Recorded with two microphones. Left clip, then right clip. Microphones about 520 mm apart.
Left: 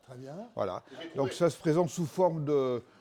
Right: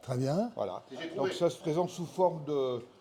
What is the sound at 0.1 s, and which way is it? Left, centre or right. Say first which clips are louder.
Speech: right 13 dB; right.